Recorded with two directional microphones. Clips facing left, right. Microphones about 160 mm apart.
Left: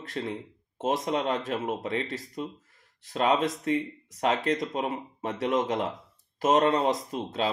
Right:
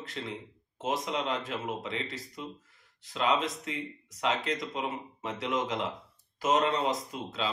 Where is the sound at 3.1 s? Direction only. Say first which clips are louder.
Left 4 dB; 50° left (ahead or behind).